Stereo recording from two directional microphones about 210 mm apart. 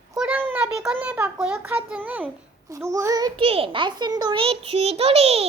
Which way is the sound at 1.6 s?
10° right (ahead or behind).